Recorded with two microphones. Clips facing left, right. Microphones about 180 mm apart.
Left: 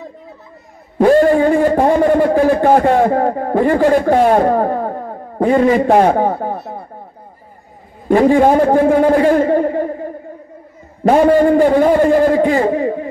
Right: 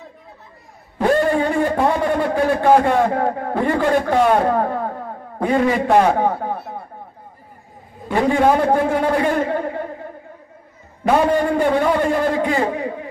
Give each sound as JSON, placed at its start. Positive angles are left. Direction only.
{"t": 0.9, "sound": "a man's voice", "side_deg": 50}
{"t": 8.1, "sound": "a man's voice", "side_deg": 45}
{"t": 11.1, "sound": "a man's voice", "side_deg": 45}